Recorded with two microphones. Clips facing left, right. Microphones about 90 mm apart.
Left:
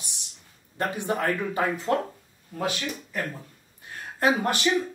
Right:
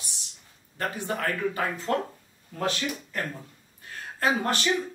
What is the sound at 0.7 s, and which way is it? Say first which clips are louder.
Speech: left 3 dB; 20° left (ahead or behind).